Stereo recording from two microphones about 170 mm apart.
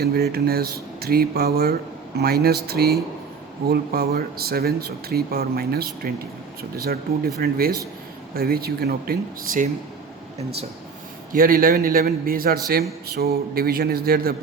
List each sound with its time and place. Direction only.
0.0 s speech: 65° right (ahead or behind)
11.3 s speech: 55° right (ahead or behind)